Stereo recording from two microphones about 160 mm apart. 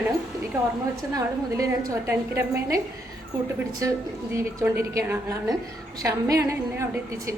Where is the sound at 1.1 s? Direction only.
20° right (ahead or behind).